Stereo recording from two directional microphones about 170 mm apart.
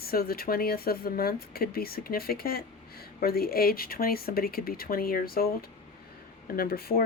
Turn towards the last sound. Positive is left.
turn(degrees=60)  # may be behind; listen again after turning